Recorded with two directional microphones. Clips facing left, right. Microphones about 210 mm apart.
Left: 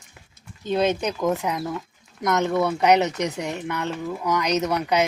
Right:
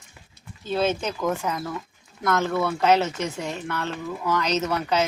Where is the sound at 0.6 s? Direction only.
15° left (ahead or behind).